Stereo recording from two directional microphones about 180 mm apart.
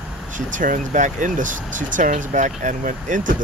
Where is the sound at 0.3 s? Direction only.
45° right (ahead or behind).